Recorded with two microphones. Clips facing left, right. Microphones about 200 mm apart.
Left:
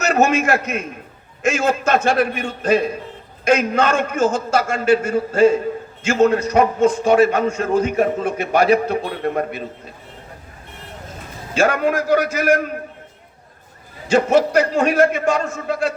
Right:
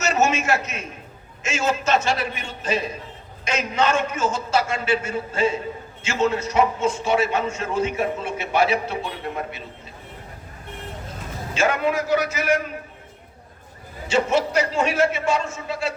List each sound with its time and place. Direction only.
0.0 s a man's voice: 55° left (ahead or behind)
11.6 s a man's voice: 50° left (ahead or behind)
14.1 s a man's voice: 50° left (ahead or behind)